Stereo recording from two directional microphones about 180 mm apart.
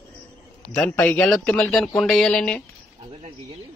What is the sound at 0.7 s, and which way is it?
Speech, 10° left (ahead or behind).